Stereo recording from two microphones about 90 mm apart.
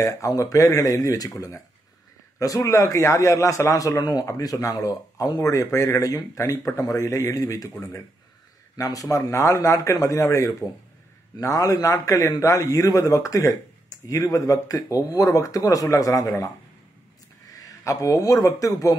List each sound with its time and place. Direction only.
0.0 s a man's voice: 40° left (ahead or behind)
8.7 s a man's voice: 40° left (ahead or behind)
17.5 s speech: 40° left (ahead or behind)